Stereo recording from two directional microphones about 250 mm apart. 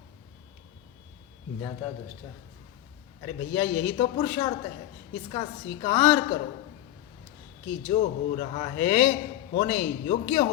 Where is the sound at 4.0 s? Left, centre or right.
Left.